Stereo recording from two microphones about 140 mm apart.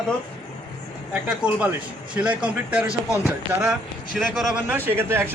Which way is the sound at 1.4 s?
10° right (ahead or behind).